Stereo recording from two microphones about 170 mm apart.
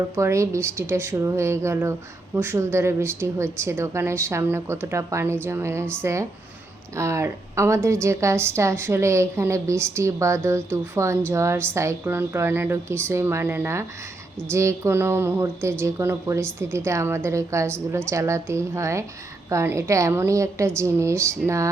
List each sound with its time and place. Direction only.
0.2 s speech: 15° right (ahead or behind)